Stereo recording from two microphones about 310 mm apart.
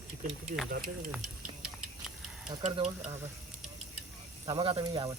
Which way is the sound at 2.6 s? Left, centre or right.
Right.